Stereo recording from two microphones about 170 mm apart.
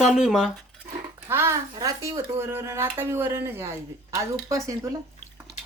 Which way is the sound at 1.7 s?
20° right (ahead or behind).